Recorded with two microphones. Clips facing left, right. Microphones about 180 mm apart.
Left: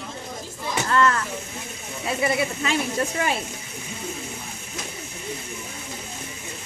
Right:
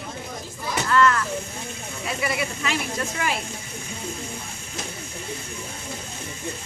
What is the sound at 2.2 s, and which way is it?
Speech, 30° left (ahead or behind).